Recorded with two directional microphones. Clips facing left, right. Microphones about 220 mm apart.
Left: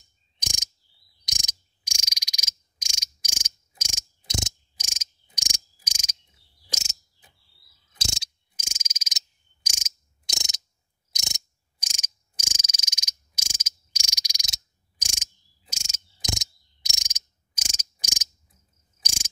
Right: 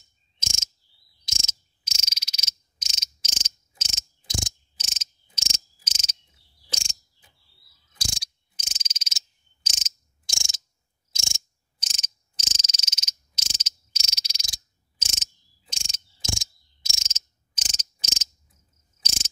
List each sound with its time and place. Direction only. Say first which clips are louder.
1.2 s frog: right 3 dB; 15° left (ahead or behind)
4.3 s cricket: left 1 dB; 20° left (ahead or behind)
8.0 s mechanisms: left 1 dB; 25° left (ahead or behind)
8.5 s frog: left 3 dB; 10° left (ahead or behind)
10.2 s a sound: left 4 dB; 20° left (ahead or behind)
11.1 s mechanisms: left 1 dB; 20° left (ahead or behind)
15.7 s cricket: right 1 dB; 10° left (ahead or behind)